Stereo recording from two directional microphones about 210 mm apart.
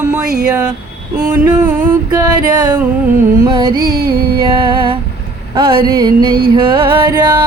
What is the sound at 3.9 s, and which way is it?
Music, 45° right (ahead or behind).